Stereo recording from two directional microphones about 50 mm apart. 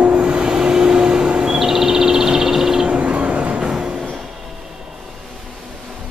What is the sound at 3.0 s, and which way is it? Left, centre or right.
Vehicle, right.